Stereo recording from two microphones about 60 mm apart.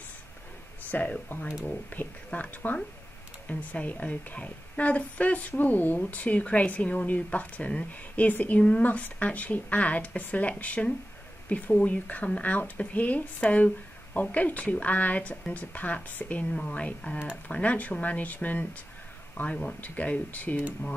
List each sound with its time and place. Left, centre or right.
0.9 s a woman's voice: left